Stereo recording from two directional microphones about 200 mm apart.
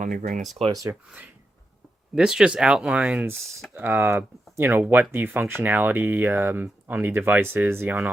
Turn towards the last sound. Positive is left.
turn(degrees=-10)  # may be behind; listen again after turning